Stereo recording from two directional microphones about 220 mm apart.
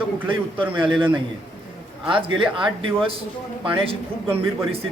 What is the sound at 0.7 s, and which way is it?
Speech, 25° right (ahead or behind).